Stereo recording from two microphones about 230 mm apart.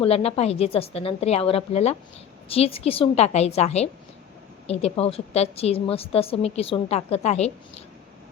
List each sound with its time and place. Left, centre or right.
0.0 s a woman's voice: left